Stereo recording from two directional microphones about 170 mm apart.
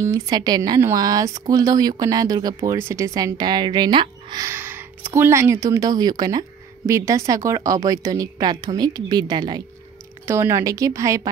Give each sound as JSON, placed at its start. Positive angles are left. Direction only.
{"t": 0.0, "sound": "speech", "side_deg": -25}
{"t": 4.5, "sound": "a woman's voice", "side_deg": -10}
{"t": 10.2, "sound": "speech", "side_deg": -15}